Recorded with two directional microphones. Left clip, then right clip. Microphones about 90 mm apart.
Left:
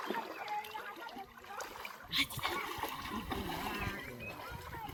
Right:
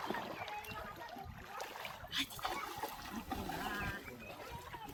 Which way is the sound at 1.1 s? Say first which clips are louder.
Left 2 dB; 5° left (ahead or behind).